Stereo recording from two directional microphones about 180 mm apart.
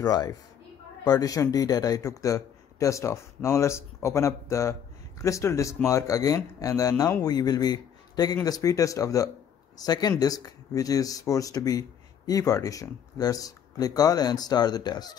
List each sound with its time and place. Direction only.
0.0 s a man's voice: 20° left (ahead or behind)